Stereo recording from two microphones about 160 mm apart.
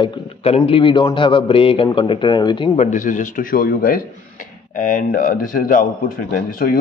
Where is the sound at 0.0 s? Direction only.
35° left (ahead or behind).